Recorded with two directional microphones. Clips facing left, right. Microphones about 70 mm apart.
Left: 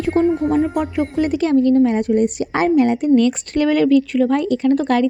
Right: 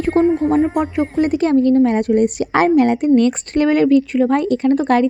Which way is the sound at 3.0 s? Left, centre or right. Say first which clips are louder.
Right 1 dB; right.